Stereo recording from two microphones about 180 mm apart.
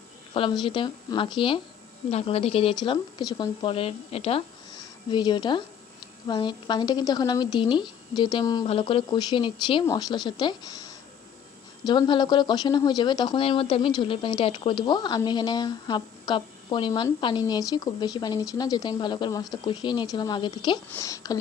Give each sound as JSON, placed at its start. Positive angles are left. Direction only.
{"t": 0.3, "sound": "speech", "side_deg": 30}